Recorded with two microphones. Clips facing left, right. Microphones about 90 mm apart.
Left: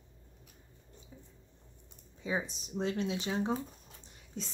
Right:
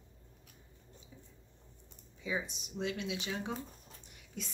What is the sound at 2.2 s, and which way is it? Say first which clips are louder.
A woman's voice: left 3 dB; 35° left (ahead or behind).